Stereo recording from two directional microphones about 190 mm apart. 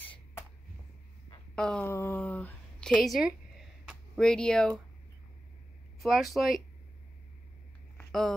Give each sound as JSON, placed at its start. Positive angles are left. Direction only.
{"t": 1.5, "sound": "a woman's voice", "side_deg": 5}
{"t": 3.8, "sound": "a sound", "side_deg": 5}
{"t": 5.9, "sound": "speech", "side_deg": 0}
{"t": 8.1, "sound": "speech", "side_deg": 0}